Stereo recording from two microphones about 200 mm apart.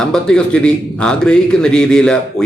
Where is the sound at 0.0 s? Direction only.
5° left (ahead or behind).